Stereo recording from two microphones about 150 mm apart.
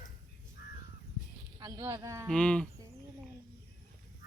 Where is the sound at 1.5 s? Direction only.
25° right (ahead or behind).